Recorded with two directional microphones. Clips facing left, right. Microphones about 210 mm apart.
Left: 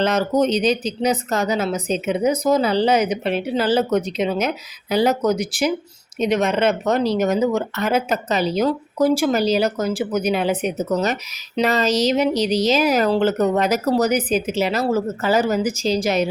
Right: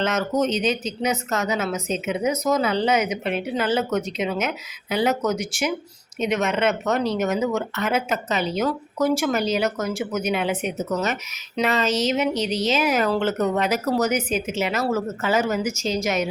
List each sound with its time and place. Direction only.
0.0 s speech: 35° left (ahead or behind)